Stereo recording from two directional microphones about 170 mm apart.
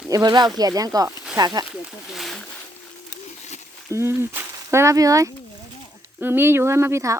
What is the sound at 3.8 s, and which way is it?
Speech, 15° right (ahead or behind).